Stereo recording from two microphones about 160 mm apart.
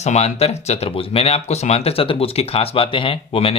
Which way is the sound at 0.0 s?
45° left (ahead or behind).